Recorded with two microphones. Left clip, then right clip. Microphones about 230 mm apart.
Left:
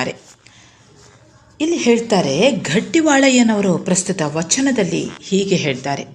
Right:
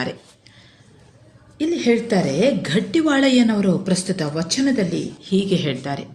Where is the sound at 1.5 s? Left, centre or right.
Left.